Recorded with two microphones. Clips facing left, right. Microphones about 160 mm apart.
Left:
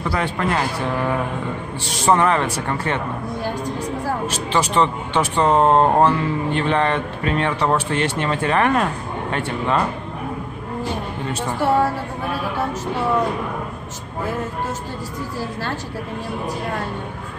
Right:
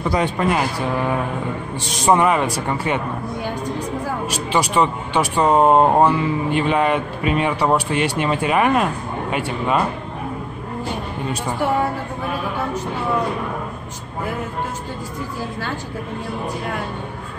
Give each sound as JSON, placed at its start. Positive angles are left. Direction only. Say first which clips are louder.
{"t": 0.1, "sound": "speech", "louder": "right 3 dB", "side_deg": -20}
{"t": 1.9, "sound": "speech", "louder": "right 1 dB", "side_deg": -15}
{"t": 4.3, "sound": "speech", "louder": "right 1 dB", "side_deg": -10}